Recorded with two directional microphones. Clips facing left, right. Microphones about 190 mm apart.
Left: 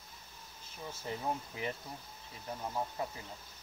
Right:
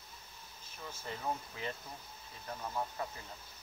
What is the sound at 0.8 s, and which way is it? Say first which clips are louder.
Speech: left 2 dB; 20° left (ahead or behind).